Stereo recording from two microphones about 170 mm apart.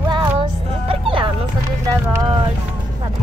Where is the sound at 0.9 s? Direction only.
30° right (ahead or behind).